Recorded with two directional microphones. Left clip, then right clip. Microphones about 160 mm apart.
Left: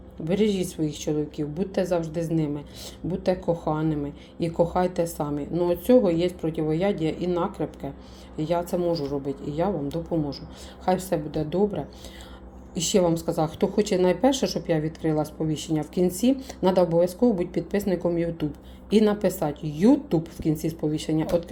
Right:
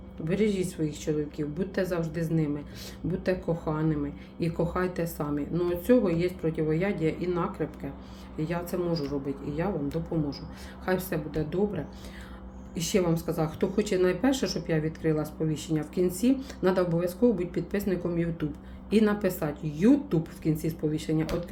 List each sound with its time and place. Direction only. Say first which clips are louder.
0.3 s a woman's voice: left 3 dB; 25° left (ahead or behind)